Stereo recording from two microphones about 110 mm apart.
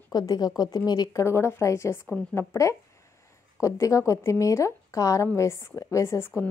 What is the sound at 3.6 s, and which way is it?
A woman's voice, 30° left (ahead or behind).